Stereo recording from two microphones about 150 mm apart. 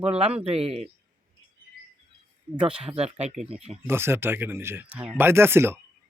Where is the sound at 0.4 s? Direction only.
40° right (ahead or behind).